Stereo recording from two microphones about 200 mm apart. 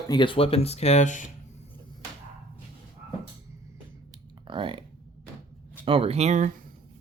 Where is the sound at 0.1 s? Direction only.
25° left (ahead or behind).